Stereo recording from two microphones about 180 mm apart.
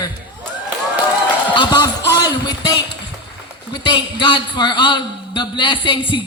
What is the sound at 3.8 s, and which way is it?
A man's voice, 25° left (ahead or behind).